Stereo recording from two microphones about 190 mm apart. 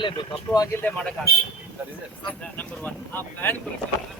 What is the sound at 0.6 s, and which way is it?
Speech, 10° left (ahead or behind).